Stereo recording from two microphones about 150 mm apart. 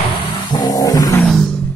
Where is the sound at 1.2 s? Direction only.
Centre (ahead or behind).